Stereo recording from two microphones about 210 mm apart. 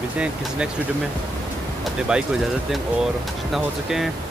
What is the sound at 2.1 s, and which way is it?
Speech, 5° right (ahead or behind).